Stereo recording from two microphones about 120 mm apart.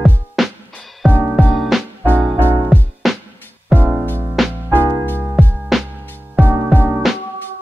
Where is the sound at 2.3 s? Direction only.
20° right (ahead or behind).